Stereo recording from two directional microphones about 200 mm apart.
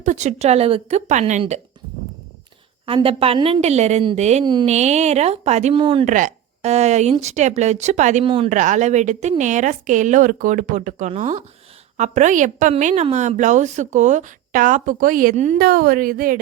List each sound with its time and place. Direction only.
0.0 s a woman's voice: 35° right (ahead or behind)
2.8 s a woman's voice: 25° right (ahead or behind)
6.1 s a woman's voice: 40° right (ahead or behind)